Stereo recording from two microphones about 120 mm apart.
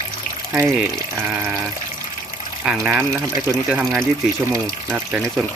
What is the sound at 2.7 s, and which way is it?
Speech, 10° right (ahead or behind).